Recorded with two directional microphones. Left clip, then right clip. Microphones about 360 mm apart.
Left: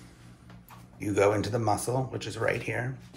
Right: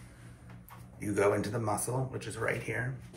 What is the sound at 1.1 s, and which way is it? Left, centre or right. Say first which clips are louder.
Speech: left 4 dB; left.